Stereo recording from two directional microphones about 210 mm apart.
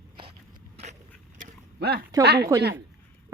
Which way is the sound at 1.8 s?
50° right (ahead or behind).